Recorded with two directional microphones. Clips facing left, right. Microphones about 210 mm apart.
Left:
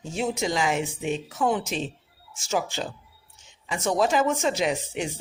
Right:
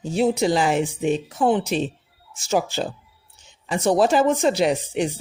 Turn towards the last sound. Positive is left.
turn(degrees=-35)  # may be behind; listen again after turning